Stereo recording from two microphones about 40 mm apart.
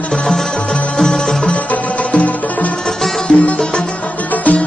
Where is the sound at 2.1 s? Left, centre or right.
Left.